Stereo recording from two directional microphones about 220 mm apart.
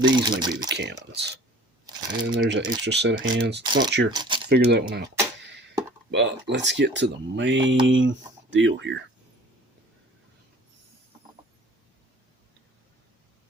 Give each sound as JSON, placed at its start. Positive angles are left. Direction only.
{"t": 0.0, "sound": "speech", "side_deg": -20}
{"t": 0.7, "sound": "speech", "side_deg": -50}
{"t": 3.6, "sound": "speech", "side_deg": -20}
{"t": 4.4, "sound": "speech", "side_deg": -45}
{"t": 6.1, "sound": "speech", "side_deg": -50}